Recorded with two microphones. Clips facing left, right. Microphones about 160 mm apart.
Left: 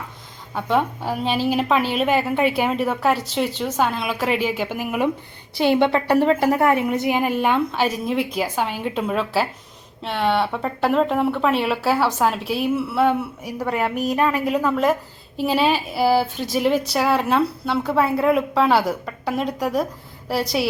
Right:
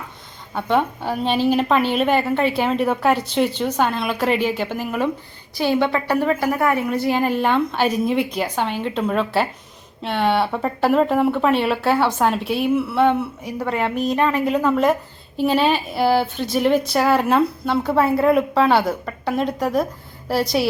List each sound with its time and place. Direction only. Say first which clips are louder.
0.5 s speech: right 1 dB; centre (ahead or behind)
5.5 s a woman's voice: left 2 dB; 25° left (ahead or behind); by 20.7 s centre (ahead or behind)